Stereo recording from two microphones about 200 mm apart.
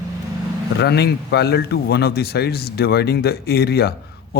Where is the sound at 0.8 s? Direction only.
55° left (ahead or behind).